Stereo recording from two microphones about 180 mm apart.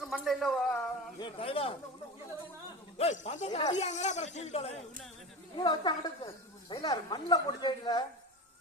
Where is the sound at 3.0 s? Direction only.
40° left (ahead or behind).